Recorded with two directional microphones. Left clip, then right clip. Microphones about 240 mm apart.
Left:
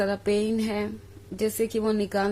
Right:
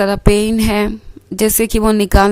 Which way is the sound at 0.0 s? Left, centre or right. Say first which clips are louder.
Right 11 dB; right.